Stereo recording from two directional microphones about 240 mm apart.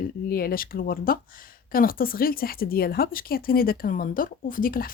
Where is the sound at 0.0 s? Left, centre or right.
Left.